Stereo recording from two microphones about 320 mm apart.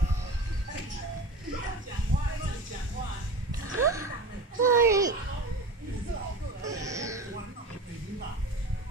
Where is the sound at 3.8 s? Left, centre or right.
Centre.